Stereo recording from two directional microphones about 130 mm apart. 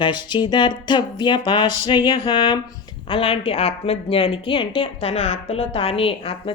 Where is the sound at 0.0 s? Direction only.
35° left (ahead or behind).